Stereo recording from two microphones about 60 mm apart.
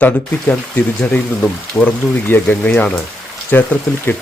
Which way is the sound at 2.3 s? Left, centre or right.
Left.